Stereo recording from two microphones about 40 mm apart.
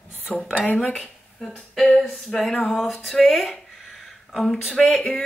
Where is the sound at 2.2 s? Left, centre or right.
Centre.